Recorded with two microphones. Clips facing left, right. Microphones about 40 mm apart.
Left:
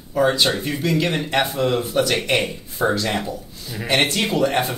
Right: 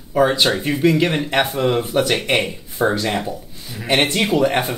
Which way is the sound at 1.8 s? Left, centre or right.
Right.